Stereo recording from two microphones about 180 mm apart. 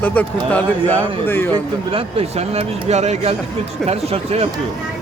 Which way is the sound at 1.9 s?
35° right (ahead or behind).